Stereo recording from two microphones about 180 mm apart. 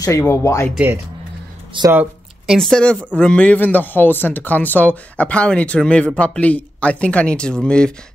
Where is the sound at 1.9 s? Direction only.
5° right (ahead or behind).